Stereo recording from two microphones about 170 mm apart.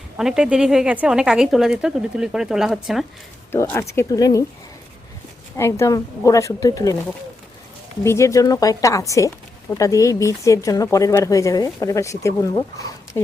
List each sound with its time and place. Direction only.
0.2 s speech: 5° right (ahead or behind)
3.5 s speech: 15° left (ahead or behind)
5.5 s speech: 15° left (ahead or behind)
8.0 s speech: 15° left (ahead or behind)